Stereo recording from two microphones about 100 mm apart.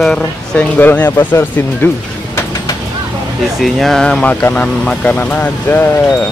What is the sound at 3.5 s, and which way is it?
Speech, centre (ahead or behind).